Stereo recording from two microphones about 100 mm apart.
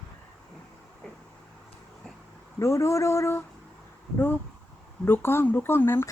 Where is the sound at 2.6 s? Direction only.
30° left (ahead or behind).